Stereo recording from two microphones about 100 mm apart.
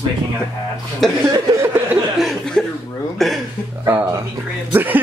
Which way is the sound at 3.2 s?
Centre (ahead or behind).